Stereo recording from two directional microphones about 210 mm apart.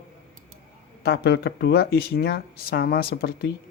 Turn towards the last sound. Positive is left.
turn(degrees=45)  # may be behind; listen again after turning